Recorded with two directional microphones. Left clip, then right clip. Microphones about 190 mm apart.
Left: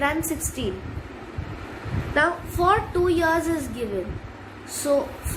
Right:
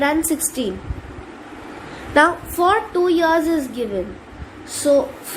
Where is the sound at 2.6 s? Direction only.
35° right (ahead or behind).